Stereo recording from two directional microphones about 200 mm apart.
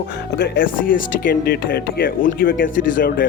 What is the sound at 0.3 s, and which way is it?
Speech, 55° left (ahead or behind).